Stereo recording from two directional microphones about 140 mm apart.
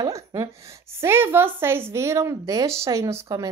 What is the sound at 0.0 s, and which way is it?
A woman's voice, 20° right (ahead or behind).